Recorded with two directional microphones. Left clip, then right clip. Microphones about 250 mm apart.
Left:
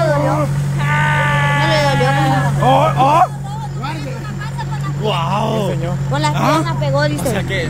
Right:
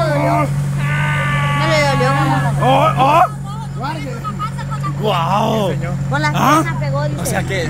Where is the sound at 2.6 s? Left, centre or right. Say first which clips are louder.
Even; centre.